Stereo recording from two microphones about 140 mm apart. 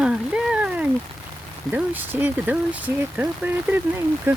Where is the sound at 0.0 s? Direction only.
5° right (ahead or behind).